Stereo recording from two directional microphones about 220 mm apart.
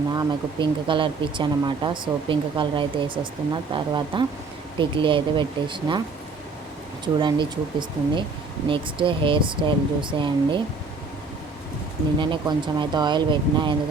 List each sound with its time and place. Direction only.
0.1 s speech: 20° right (ahead or behind)
7.0 s speech: 20° right (ahead or behind)
12.2 s speech: 20° right (ahead or behind)